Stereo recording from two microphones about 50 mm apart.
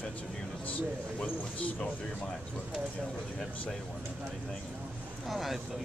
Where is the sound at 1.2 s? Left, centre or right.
Left.